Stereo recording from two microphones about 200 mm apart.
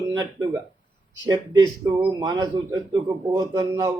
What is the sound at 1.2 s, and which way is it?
Speech, 20° right (ahead or behind).